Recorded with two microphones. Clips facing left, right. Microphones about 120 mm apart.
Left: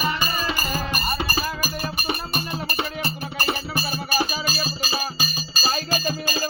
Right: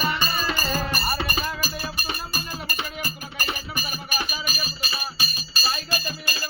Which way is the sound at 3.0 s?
30° left (ahead or behind).